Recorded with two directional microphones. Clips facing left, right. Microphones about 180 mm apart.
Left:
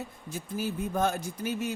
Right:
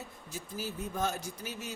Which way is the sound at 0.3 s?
55° left (ahead or behind).